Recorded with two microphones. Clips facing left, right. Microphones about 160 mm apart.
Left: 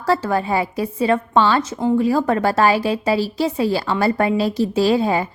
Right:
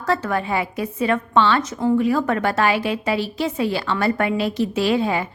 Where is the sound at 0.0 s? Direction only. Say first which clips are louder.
Left 3 dB; 30° left (ahead or behind).